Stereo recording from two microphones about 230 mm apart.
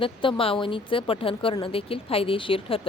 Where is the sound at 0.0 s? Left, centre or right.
Left.